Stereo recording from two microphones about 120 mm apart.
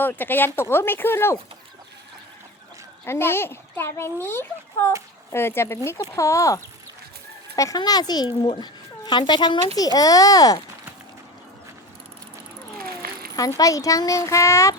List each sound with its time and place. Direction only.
0.0 s speech: 15° left (ahead or behind)
3.1 s a child's voice: 20° left (ahead or behind)
13.3 s a child's voice: 30° left (ahead or behind)